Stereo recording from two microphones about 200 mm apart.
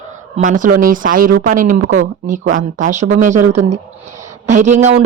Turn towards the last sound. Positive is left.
turn(degrees=-35)  # may be behind; listen again after turning